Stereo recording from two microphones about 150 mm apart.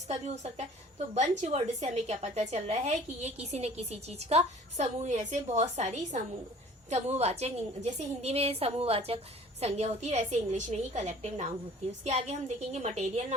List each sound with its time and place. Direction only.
0.1 s a woman's voice: 45° right (ahead or behind)